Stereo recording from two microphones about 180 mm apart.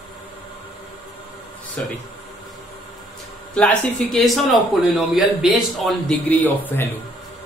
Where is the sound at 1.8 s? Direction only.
5° left (ahead or behind).